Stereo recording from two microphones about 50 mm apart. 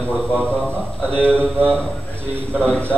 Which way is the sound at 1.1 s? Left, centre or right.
Left.